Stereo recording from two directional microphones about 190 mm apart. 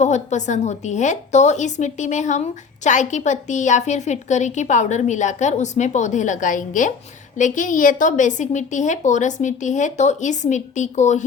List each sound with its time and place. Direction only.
0.0 s a woman's voice: 40° left (ahead or behind)